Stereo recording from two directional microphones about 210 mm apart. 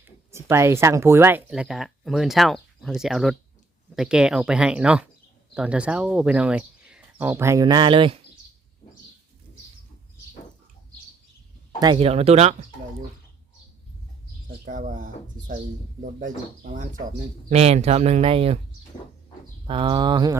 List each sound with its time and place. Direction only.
0.0 s speech: 10° right (ahead or behind)
11.8 s speech: 25° right (ahead or behind)
14.6 s speech: 40° right (ahead or behind)
19.6 s speech: 25° right (ahead or behind)